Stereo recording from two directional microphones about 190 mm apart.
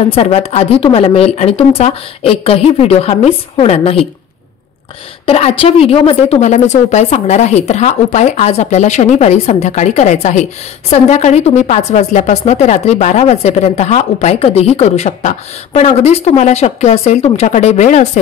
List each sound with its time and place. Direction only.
0.0 s a woman's voice: 30° left (ahead or behind)
5.2 s a woman's voice: 30° left (ahead or behind)